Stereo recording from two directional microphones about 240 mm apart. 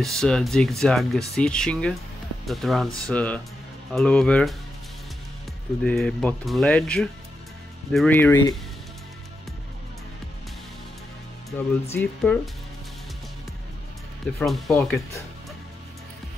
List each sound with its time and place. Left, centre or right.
0.0 s speech: centre
5.9 s speech: centre
11.5 s speech: centre
14.4 s speech: centre